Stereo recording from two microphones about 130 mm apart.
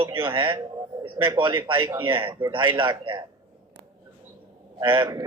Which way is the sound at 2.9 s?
30° right (ahead or behind).